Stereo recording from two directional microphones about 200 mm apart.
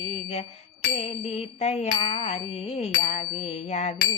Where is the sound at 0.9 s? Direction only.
30° left (ahead or behind).